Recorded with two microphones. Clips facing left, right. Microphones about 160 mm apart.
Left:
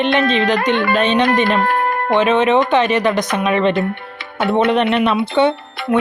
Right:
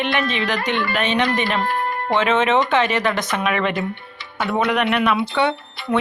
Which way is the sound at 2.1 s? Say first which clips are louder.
Left 4 dB; 15° left (ahead or behind).